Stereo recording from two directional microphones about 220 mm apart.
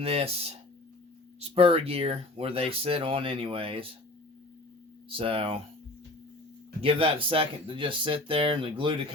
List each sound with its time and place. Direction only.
0.0 s speech: 25° right (ahead or behind)
5.0 s speech: 25° right (ahead or behind)
6.8 s speech: 25° right (ahead or behind)